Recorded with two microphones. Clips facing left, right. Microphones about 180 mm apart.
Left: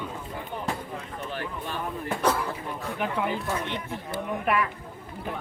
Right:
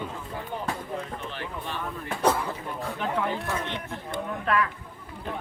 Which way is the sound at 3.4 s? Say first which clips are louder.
Left 1 dB; 10° left (ahead or behind).